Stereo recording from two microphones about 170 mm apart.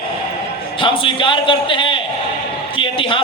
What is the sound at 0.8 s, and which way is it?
A man's voice, 30° left (ahead or behind).